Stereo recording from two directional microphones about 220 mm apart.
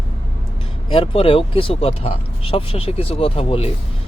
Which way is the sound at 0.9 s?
25° left (ahead or behind).